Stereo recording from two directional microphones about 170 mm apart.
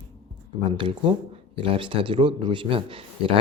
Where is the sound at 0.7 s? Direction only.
30° right (ahead or behind).